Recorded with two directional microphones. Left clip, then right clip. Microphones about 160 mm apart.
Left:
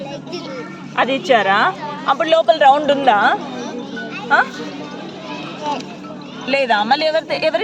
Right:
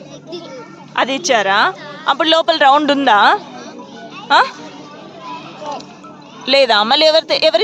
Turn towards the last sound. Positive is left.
turn(degrees=-40)  # may be behind; listen again after turning